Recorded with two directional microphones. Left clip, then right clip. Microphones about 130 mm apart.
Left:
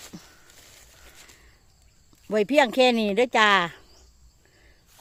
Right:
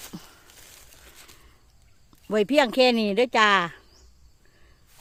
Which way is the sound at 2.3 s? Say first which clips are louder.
Left 1 dB; 15° right (ahead or behind).